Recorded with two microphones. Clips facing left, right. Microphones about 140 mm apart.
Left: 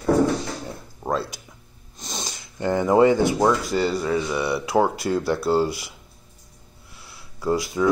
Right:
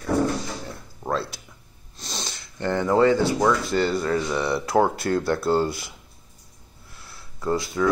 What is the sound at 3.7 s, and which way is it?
Speech, 5° left (ahead or behind).